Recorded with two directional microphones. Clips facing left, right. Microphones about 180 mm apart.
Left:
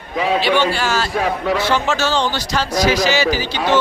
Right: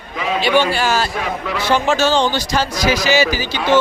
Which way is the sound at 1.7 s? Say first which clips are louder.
Right 3 dB; 15° right (ahead or behind).